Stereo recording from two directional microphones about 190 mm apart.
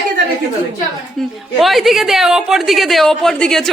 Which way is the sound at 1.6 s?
Centre (ahead or behind).